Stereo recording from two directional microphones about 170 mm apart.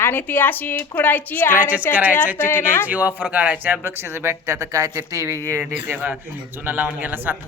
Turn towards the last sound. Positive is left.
turn(degrees=-10)  # may be behind; listen again after turning